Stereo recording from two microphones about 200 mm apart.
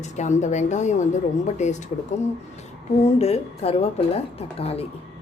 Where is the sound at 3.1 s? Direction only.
30° left (ahead or behind).